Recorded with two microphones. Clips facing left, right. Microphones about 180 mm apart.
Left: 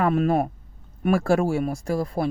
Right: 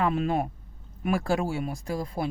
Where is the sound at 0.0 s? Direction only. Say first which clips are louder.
Left 5 dB; 45° left (ahead or behind).